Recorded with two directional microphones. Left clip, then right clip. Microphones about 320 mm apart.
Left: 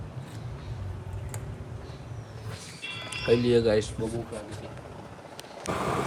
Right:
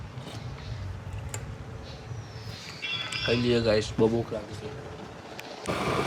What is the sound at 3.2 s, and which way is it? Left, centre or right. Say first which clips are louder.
Speech: left 4 dB; centre.